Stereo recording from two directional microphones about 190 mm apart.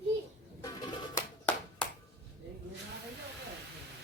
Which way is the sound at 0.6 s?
20° left (ahead or behind).